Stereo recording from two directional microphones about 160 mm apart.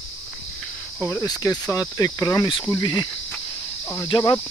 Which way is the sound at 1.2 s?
20° left (ahead or behind).